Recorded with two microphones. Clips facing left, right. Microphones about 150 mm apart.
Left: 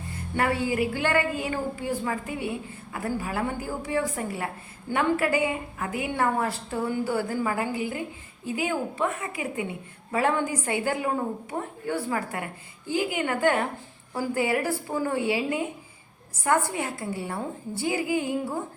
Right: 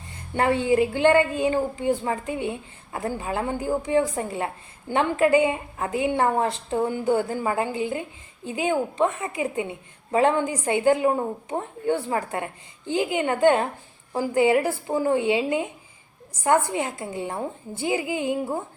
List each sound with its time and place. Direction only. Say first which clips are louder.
0.3 s a woman's voice: right 5 dB; 25° right (ahead or behind)
16.6 s a woman's voice: right 2 dB; 20° right (ahead or behind)